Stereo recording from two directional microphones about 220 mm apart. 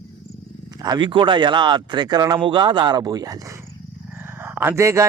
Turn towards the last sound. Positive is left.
turn(degrees=-15)  # may be behind; listen again after turning